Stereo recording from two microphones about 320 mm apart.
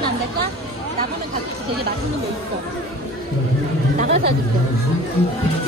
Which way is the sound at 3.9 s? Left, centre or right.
Right.